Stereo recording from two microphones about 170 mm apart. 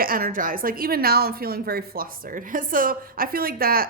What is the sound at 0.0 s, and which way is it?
A woman's voice, 55° right (ahead or behind).